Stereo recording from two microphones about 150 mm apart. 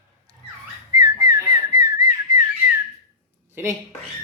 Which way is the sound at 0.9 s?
25° right (ahead or behind).